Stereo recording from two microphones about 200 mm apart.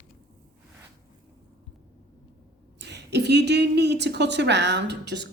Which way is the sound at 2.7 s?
60° right (ahead or behind).